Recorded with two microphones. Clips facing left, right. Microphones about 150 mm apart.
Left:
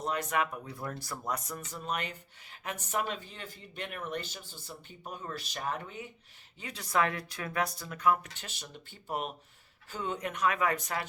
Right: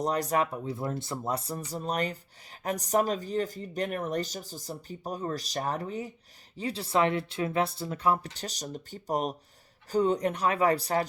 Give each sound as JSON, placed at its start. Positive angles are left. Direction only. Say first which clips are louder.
{"t": 0.0, "sound": "speech", "louder": "right 5 dB", "side_deg": -40}